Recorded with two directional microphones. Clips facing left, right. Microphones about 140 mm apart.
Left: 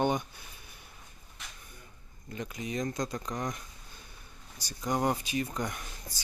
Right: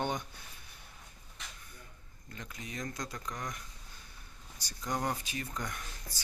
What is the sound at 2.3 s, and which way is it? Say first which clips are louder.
Speech: left 8 dB; 15° left (ahead or behind).